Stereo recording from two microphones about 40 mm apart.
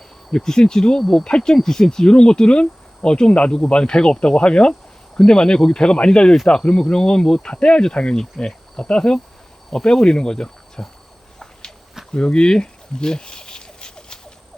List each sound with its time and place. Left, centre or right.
0.3 s speech: centre
8.4 s insect: centre
8.9 s speech: centre
9.6 s cricket: centre
12.1 s insect: left